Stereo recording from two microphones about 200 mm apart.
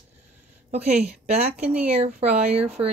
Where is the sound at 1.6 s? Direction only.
5° right (ahead or behind).